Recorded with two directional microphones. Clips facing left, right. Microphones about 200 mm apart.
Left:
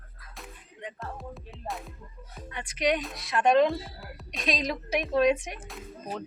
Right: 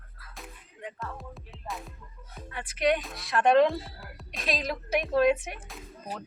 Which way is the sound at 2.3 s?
5° right (ahead or behind).